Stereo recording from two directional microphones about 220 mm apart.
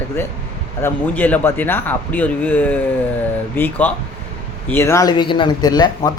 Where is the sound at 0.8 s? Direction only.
10° left (ahead or behind).